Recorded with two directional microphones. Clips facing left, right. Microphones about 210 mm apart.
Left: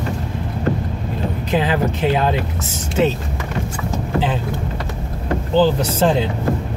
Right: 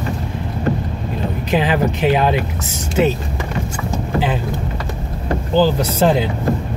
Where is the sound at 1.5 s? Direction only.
15° right (ahead or behind).